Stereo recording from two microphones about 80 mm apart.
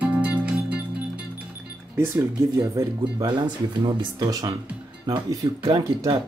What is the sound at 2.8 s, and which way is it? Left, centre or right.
Speech, right.